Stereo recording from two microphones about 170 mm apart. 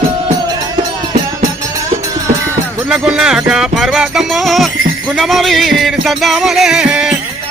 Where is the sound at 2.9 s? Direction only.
5° right (ahead or behind).